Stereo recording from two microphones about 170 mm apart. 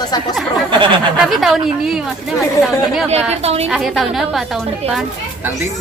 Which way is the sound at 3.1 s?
40° right (ahead or behind).